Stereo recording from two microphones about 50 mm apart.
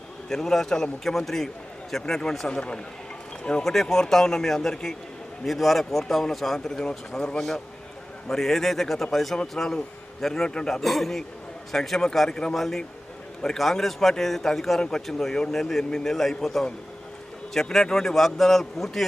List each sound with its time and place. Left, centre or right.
0.3 s a man's voice: centre
3.6 s a man's voice: centre
10.8 s a man's voice: centre
12.5 s a man's voice: centre